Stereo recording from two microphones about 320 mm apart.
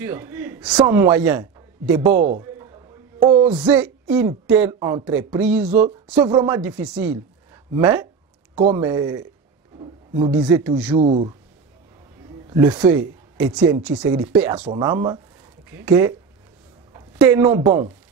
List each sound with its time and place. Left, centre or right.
0.0 s a man's voice: centre
2.1 s speech: right
2.4 s a sound: centre
3.6 s a man's voice: centre
5.7 s a man's voice: right
8.5 s speech: centre
8.8 s a man's voice: centre
11.0 s speech: centre
12.4 s a man's voice: centre
16.9 s a sound: centre
17.5 s a man's voice: centre